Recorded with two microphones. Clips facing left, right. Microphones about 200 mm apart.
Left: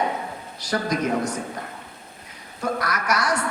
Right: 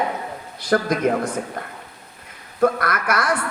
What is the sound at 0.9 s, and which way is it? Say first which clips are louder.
Speech: right 2 dB; 55° right (ahead or behind).